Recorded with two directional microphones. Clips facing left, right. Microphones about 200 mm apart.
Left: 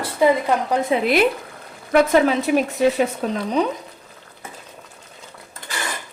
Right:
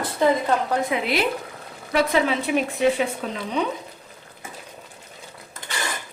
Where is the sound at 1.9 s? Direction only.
45° left (ahead or behind).